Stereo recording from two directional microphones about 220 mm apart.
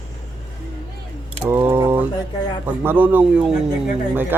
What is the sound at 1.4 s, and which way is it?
Speech, 10° right (ahead or behind).